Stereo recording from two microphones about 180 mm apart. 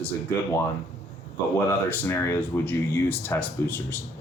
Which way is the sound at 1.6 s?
10° left (ahead or behind).